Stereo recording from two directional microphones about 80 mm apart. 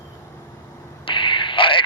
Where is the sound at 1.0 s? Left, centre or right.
Left.